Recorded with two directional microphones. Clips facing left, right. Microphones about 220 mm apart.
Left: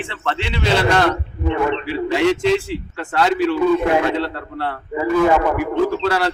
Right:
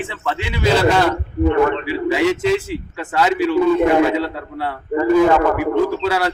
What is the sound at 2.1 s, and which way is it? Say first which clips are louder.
A man's voice: left 1 dB; 5° right (ahead or behind).